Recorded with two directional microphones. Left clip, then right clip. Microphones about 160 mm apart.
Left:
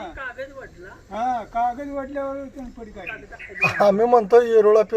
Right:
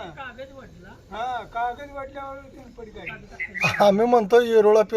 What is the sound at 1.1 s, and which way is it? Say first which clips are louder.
Speech: left 5 dB; 60° left (ahead or behind).